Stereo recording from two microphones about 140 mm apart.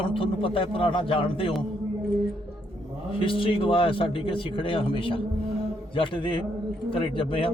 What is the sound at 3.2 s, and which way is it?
Speech, 40° left (ahead or behind).